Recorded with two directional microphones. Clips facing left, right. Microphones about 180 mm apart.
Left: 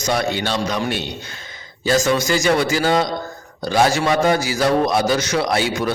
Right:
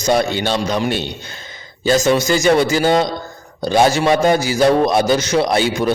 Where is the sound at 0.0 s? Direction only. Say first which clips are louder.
Right 4 dB; 30° right (ahead or behind).